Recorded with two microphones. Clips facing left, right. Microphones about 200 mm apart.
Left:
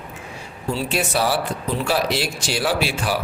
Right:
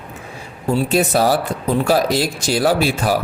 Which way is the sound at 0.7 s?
55° right (ahead or behind).